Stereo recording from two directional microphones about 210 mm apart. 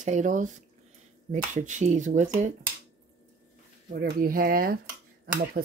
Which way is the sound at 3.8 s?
45° right (ahead or behind).